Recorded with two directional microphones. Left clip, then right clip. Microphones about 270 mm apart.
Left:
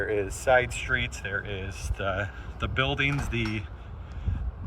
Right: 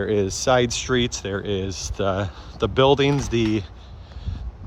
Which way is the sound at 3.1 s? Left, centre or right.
Centre.